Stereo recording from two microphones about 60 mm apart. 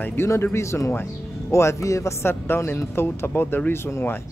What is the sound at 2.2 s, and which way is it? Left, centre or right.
Speech, left.